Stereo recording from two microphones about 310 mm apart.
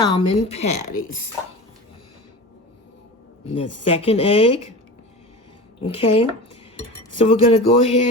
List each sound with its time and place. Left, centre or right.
0.0 s a woman's voice: centre
3.5 s speech: centre
6.0 s a woman's voice: centre
7.3 s speech: centre